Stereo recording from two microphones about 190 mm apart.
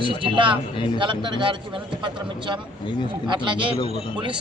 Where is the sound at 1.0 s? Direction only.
25° right (ahead or behind).